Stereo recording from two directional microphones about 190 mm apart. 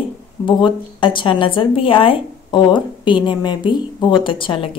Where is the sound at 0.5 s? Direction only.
25° left (ahead or behind).